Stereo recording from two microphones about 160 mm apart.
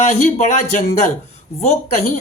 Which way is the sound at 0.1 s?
50° left (ahead or behind).